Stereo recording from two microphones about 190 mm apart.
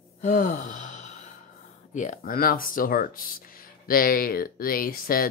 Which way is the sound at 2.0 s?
45° left (ahead or behind).